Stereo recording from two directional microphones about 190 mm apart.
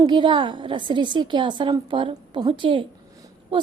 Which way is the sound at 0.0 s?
25° right (ahead or behind).